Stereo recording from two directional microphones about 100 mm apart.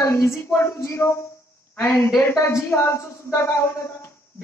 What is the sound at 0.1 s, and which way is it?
A man's voice, 25° left (ahead or behind).